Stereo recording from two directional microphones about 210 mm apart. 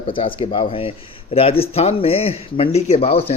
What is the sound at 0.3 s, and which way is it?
Speech, 25° left (ahead or behind).